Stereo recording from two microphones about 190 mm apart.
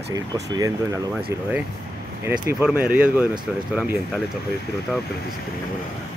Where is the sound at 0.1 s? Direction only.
20° right (ahead or behind).